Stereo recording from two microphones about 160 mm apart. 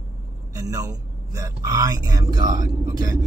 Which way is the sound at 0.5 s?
20° right (ahead or behind).